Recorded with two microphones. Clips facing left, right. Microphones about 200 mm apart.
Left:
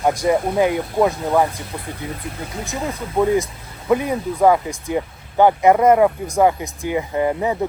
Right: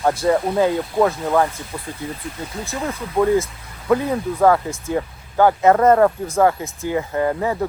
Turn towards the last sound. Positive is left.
turn(degrees=15)  # may be behind; listen again after turning